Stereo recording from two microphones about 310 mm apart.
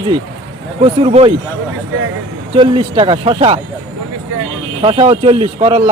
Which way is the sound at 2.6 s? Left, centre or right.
Centre.